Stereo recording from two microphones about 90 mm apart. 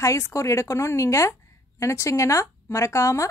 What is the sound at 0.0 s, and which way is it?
Speech, 35° left (ahead or behind).